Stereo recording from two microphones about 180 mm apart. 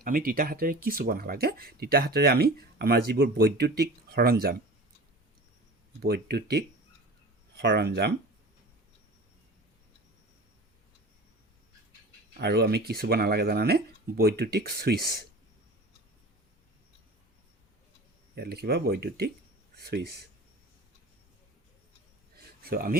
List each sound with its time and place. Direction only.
0.0 s speech: 50° right (ahead or behind)
6.0 s speech: 65° right (ahead or behind)
12.4 s speech: 65° right (ahead or behind)
18.3 s speech: 65° right (ahead or behind)
22.4 s a sound: 55° right (ahead or behind)